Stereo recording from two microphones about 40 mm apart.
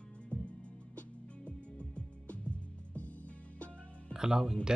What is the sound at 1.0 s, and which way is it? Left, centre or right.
Music, left.